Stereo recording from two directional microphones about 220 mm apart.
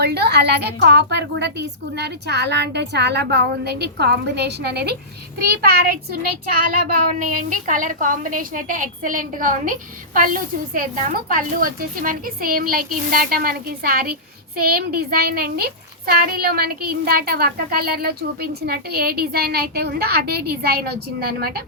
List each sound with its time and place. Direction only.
0.0 s a woman's voice: 50° right (ahead or behind)